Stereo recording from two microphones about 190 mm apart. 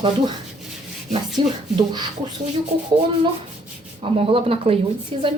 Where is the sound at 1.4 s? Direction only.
25° right (ahead or behind).